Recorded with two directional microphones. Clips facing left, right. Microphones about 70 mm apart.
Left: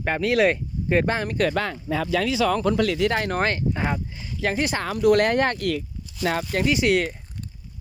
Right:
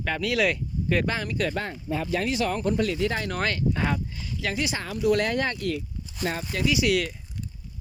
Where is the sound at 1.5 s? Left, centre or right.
Left.